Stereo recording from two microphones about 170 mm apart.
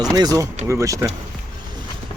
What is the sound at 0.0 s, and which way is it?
Speech, 20° right (ahead or behind).